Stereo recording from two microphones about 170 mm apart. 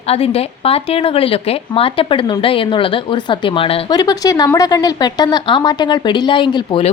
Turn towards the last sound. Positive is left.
turn(degrees=30)  # may be behind; listen again after turning